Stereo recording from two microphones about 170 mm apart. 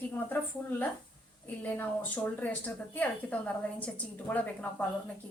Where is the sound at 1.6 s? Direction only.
10° left (ahead or behind).